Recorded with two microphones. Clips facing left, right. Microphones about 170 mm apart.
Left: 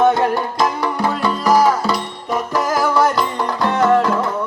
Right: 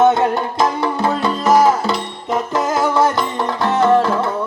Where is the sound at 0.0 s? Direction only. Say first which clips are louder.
Right 1 dB; 20° right (ahead or behind).